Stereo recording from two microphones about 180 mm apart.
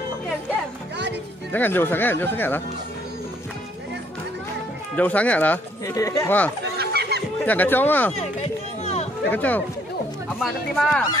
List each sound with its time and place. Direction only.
1.5 s speech: 10° left (ahead or behind)
4.9 s speech: 10° left (ahead or behind)
6.8 s a sound: 65° right (ahead or behind)
7.4 s speech: 10° left (ahead or behind)
9.3 s speech: 10° left (ahead or behind)